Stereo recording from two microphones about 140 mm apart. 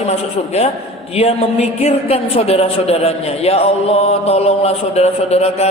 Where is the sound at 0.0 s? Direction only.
50° left (ahead or behind).